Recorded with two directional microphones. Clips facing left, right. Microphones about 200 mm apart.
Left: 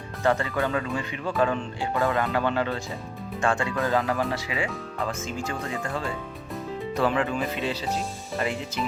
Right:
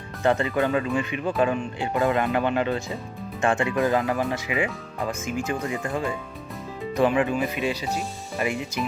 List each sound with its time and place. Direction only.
0.2 s speech: 20° right (ahead or behind)